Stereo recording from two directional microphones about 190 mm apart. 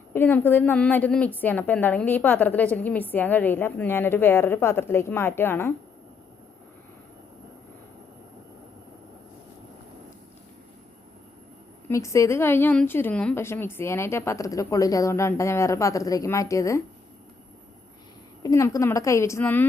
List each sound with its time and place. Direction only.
0.1 s a woman's voice: 10° left (ahead or behind)
11.9 s a woman's voice: 15° left (ahead or behind)
18.4 s a woman's voice: 15° left (ahead or behind)